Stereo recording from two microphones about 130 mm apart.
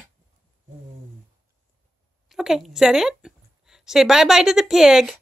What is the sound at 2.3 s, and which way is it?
A woman's voice, 5° right (ahead or behind).